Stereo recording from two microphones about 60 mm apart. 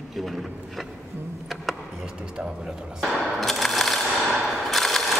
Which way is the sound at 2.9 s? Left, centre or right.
Centre.